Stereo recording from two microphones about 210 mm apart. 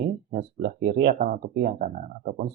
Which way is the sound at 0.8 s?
55° right (ahead or behind).